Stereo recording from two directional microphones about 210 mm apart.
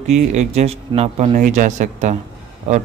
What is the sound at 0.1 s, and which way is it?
Speech, 35° right (ahead or behind).